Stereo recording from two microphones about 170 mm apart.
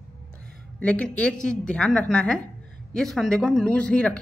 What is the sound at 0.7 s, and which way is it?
A woman's voice, 10° left (ahead or behind).